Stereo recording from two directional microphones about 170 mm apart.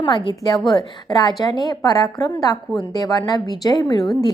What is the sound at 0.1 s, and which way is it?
A woman's voice, 25° left (ahead or behind).